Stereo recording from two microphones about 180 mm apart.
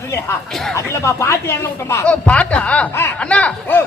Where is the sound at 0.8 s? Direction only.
15° left (ahead or behind).